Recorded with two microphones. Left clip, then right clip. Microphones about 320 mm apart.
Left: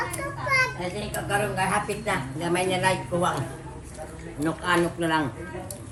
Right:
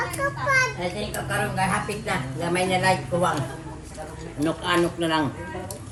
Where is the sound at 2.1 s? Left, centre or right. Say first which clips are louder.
Even; left.